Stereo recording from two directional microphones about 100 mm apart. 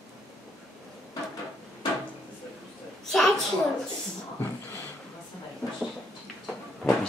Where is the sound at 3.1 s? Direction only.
Centre (ahead or behind).